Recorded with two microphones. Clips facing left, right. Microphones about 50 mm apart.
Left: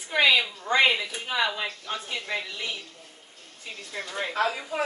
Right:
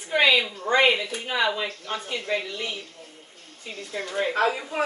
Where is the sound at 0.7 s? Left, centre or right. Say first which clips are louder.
Right 2 dB; centre.